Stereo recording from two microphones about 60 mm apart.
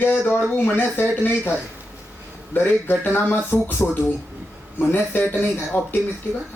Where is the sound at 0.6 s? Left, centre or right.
Left.